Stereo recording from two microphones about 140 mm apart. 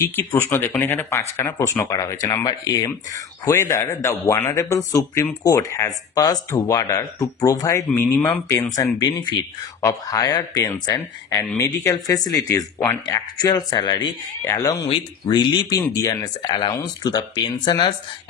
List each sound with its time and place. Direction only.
0.0 s speech: 20° left (ahead or behind)
9.8 s speech: 25° left (ahead or behind)